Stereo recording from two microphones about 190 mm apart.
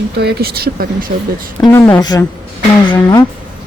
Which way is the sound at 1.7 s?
15° left (ahead or behind).